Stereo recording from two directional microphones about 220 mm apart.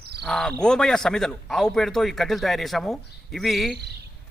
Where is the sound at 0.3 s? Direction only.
5° left (ahead or behind).